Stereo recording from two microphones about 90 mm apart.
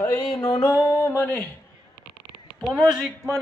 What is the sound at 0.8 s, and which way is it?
Speech, 30° left (ahead or behind).